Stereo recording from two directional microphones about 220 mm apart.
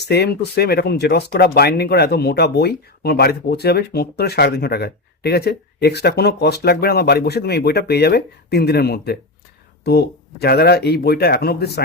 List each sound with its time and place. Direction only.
0.0 s speech: 45° left (ahead or behind)